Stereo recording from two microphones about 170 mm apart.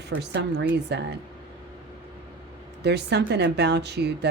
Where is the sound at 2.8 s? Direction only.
80° right.